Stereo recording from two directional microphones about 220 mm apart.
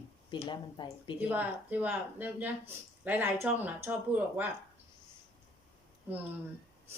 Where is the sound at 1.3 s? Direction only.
5° right (ahead or behind).